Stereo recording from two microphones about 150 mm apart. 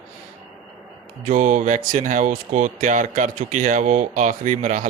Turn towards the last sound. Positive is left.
turn(degrees=-55)  # may be behind; listen again after turning